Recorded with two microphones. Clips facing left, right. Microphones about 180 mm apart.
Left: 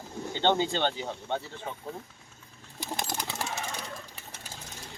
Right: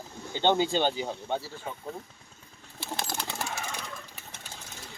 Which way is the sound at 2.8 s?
15° left (ahead or behind).